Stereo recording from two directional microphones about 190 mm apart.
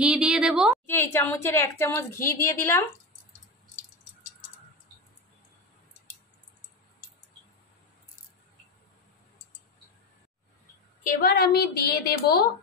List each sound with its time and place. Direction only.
0.0 s a woman's voice: 5° right (ahead or behind)
0.8 s a woman's voice: 10° left (ahead or behind)
11.1 s a woman's voice: 55° left (ahead or behind)